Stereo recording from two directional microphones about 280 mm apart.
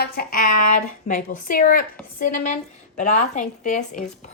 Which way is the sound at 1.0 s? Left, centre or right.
Left.